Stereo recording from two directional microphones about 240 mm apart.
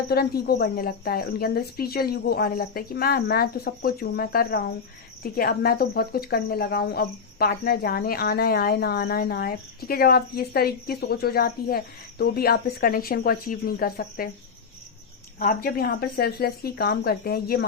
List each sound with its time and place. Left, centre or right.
0.1 s speech: left
15.4 s speech: left